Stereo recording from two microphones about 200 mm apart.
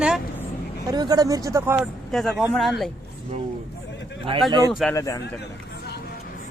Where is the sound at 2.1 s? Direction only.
Centre (ahead or behind).